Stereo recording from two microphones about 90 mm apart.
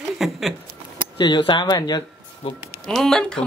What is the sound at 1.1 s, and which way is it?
Speech, 55° left (ahead or behind).